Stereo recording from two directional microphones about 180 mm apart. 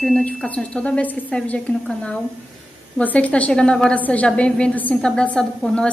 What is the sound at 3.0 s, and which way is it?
A woman's voice, 10° left (ahead or behind).